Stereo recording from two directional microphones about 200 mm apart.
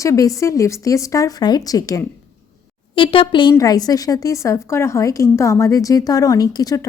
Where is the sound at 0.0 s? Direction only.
15° left (ahead or behind).